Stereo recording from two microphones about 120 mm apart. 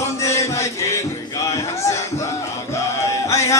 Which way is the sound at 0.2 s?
25° left (ahead or behind).